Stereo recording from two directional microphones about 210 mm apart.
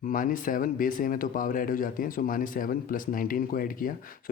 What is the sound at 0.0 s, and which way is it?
Speech, 40° left (ahead or behind).